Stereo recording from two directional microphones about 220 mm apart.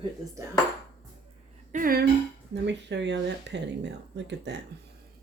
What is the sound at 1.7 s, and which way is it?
Speech, 40° right (ahead or behind).